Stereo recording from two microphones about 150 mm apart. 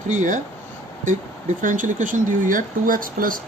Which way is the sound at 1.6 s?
60° right (ahead or behind).